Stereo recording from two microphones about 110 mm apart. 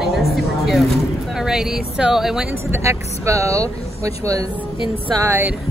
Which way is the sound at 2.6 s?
25° right (ahead or behind).